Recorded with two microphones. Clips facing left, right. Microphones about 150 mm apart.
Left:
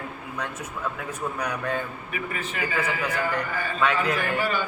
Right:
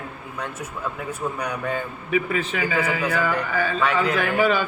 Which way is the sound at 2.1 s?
90° right.